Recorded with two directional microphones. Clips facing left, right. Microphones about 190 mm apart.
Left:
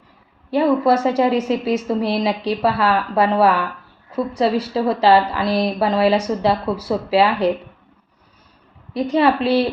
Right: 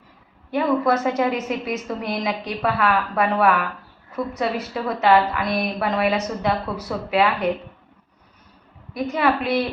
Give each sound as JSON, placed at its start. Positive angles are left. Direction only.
{"t": 0.5, "sound": "a woman's voice", "side_deg": 30}
{"t": 8.9, "sound": "a woman's voice", "side_deg": 30}